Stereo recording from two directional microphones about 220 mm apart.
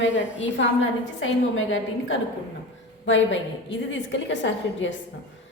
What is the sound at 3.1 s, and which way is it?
A woman's voice, 55° left (ahead or behind).